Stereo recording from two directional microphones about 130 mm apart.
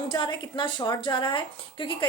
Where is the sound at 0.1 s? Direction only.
35° left (ahead or behind).